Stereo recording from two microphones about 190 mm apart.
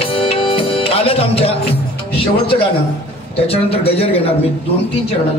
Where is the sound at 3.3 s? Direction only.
30° left (ahead or behind).